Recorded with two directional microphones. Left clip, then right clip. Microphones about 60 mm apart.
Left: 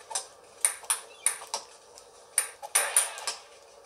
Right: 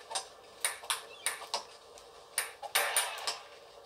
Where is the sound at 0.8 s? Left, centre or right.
Right.